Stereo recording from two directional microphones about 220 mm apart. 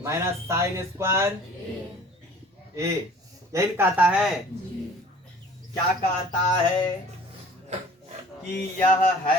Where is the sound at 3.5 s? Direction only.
10° right (ahead or behind).